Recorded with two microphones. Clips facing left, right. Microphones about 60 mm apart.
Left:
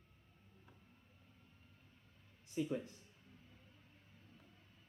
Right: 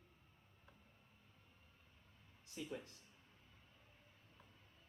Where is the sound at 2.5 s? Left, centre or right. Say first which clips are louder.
Left 9 dB; centre.